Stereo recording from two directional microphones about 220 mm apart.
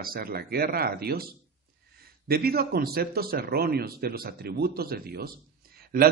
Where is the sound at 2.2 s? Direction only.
45° right (ahead or behind).